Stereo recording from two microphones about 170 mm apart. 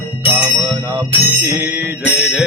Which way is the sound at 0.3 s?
15° right (ahead or behind).